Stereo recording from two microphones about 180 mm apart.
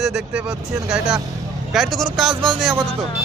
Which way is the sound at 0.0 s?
Centre (ahead or behind).